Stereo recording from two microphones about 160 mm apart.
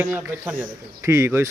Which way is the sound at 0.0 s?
10° right (ahead or behind).